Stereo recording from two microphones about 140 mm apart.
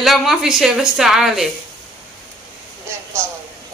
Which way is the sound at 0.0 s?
Centre (ahead or behind).